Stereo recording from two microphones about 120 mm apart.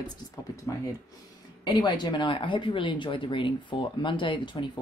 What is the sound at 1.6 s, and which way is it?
Speech, 40° left (ahead or behind).